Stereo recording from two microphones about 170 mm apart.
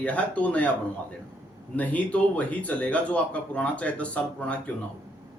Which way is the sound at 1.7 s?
10° left (ahead or behind).